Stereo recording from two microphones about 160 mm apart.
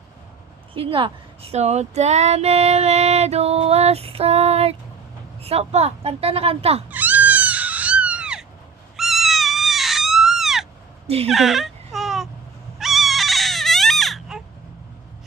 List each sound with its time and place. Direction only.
0.7 s speech: 35° right (ahead or behind)
6.9 s a sound: 10° right (ahead or behind)
11.3 s baby cry: centre (ahead or behind)